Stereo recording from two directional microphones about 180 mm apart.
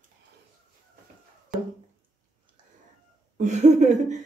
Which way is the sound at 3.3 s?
40° right (ahead or behind).